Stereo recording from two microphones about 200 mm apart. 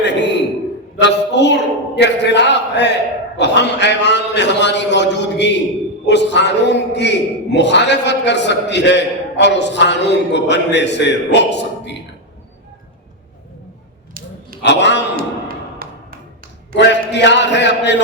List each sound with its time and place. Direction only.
0.0 s a sound: 60° left (ahead or behind)
7.5 s a man's voice: 60° left (ahead or behind)
14.6 s a man's voice: 60° left (ahead or behind)
15.1 s thump: 45° right (ahead or behind)
16.7 s a man's voice: 60° left (ahead or behind)